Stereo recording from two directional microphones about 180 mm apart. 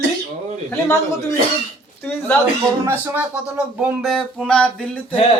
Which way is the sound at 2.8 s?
10° right (ahead or behind).